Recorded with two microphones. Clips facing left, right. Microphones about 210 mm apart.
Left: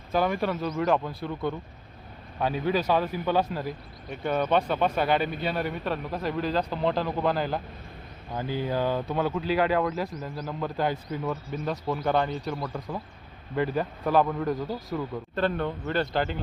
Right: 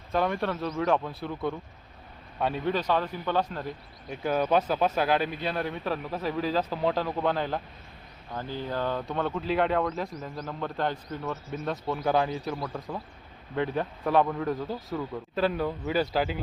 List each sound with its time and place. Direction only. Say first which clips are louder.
0.1 s a man's voice: left 2 dB; 5° left (ahead or behind)